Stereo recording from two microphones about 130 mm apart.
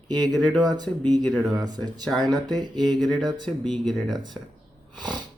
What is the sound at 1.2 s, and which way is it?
Speech, 5° left (ahead or behind).